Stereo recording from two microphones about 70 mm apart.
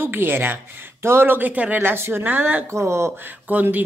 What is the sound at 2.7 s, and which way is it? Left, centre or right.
Speech, right.